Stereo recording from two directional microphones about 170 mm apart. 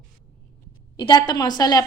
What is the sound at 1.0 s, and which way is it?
Speech, 25° left (ahead or behind).